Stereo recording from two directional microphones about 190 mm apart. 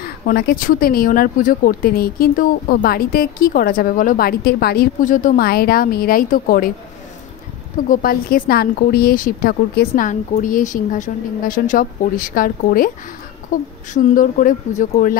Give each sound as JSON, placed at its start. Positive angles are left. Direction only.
{"t": 0.0, "sound": "speech", "side_deg": 55}
{"t": 7.9, "sound": "speech", "side_deg": 50}
{"t": 13.9, "sound": "speech", "side_deg": 40}